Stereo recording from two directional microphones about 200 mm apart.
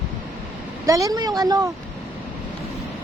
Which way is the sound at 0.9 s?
15° right (ahead or behind).